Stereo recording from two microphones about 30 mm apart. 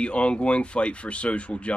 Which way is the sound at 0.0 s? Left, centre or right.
Left.